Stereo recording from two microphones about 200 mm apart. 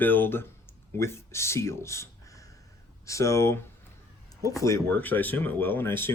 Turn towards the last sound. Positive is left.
turn(degrees=10)  # may be behind; listen again after turning